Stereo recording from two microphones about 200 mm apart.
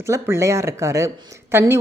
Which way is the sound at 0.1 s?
15° right (ahead or behind).